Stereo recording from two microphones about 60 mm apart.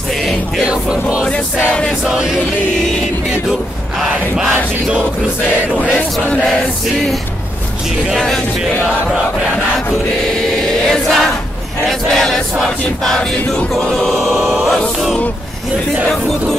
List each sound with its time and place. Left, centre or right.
1.7 s music: centre
2.0 s crowd: centre
4.0 s crowd: centre
6.3 s music: centre
10.9 s choir: centre
12.1 s crowd: centre
13.7 s choir: centre
16.1 s crowd: centre